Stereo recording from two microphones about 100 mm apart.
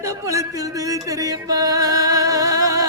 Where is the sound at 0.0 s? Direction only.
35° right (ahead or behind).